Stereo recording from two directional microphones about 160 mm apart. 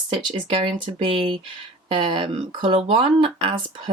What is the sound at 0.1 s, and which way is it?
Speech, 30° right (ahead or behind).